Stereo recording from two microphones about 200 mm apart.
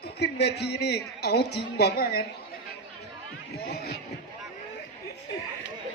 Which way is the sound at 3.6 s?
50° left (ahead or behind).